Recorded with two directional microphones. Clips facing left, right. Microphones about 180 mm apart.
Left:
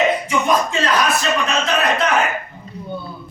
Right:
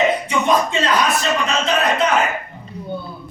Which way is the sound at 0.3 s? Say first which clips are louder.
Right 1 dB; 25° right (ahead or behind).